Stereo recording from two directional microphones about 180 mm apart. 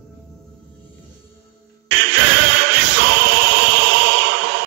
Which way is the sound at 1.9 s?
85° right.